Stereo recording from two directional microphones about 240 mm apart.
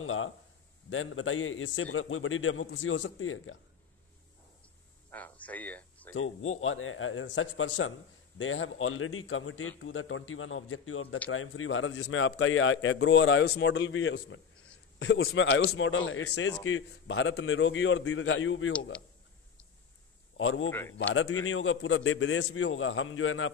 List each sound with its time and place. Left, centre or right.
0.0 s a sound: left
0.8 s a man's voice: left
5.1 s a sound: centre
6.1 s a man's voice: left
20.3 s a man's voice: left
20.7 s speech: centre
21.1 s a man's voice: left